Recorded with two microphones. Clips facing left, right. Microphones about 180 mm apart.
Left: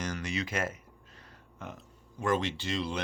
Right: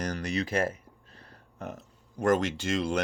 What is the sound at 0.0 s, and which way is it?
Speech, 35° right (ahead or behind).